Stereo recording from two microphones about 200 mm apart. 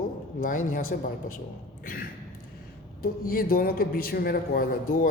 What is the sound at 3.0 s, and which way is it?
A man's voice, 45° left (ahead or behind).